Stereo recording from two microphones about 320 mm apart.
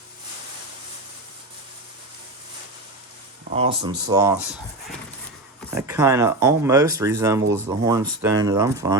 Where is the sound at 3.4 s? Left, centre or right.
Centre.